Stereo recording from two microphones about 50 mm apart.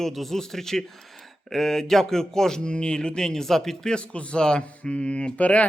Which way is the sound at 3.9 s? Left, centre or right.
Left.